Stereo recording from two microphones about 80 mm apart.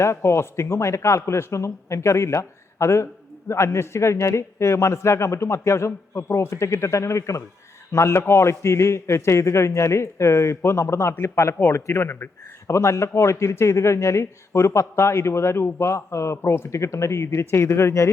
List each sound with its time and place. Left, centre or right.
0.0 s a man's voice: left